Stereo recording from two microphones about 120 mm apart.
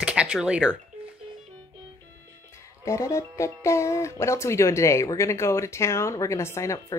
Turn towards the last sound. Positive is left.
turn(degrees=25)  # may be behind; listen again after turning